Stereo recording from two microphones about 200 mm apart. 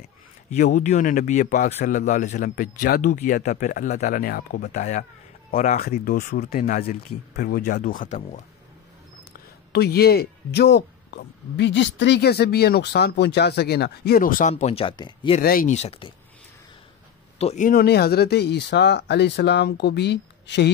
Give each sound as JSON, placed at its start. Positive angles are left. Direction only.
{"t": 0.5, "sound": "a man's voice", "side_deg": 35}
{"t": 9.7, "sound": "speech", "side_deg": 50}
{"t": 14.5, "sound": "speech", "side_deg": 30}
{"t": 15.4, "sound": "a man's voice", "side_deg": 45}
{"t": 17.4, "sound": "speech", "side_deg": 35}